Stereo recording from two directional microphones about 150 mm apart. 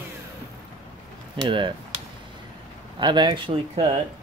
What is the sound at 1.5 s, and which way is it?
Speech, 35° right (ahead or behind).